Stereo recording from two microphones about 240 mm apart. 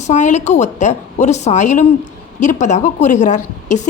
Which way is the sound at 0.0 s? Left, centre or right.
Left.